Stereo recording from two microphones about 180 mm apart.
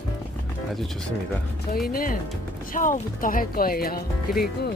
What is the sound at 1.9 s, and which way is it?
Speech, 50° left (ahead or behind).